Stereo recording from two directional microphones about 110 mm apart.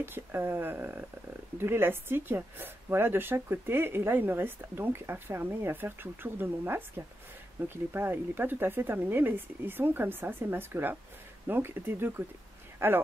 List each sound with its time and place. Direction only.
0.0 s speech: 20° right (ahead or behind)